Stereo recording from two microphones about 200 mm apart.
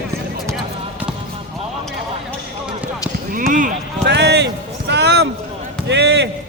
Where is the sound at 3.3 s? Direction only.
45° right (ahead or behind).